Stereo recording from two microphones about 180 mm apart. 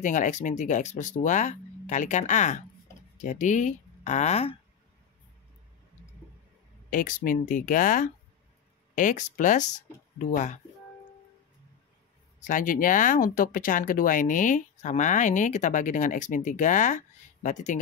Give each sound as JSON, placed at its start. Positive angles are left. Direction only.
{"t": 0.0, "sound": "speech", "side_deg": 45}
{"t": 6.9, "sound": "speech", "side_deg": 50}
{"t": 12.4, "sound": "speech", "side_deg": 50}